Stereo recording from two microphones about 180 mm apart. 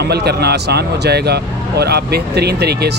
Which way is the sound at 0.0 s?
65° right (ahead or behind).